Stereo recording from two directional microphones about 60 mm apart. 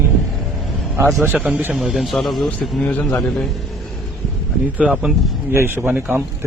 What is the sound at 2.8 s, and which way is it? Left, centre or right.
Speech, left.